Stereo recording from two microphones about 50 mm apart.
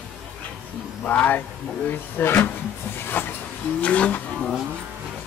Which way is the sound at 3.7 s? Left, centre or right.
Left.